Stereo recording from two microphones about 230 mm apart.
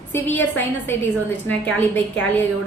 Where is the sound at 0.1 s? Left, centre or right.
Centre.